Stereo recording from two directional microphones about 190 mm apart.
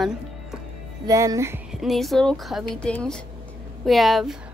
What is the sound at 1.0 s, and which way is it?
Speech, 15° right (ahead or behind).